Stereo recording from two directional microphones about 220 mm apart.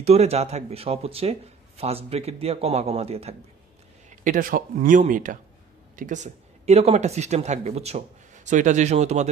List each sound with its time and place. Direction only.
0.0 s a man's voice: 30° right (ahead or behind)